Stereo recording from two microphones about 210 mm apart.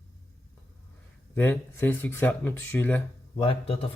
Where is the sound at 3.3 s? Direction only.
25° left (ahead or behind).